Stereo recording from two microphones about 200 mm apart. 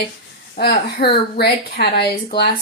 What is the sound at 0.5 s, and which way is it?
Speech, 50° left (ahead or behind).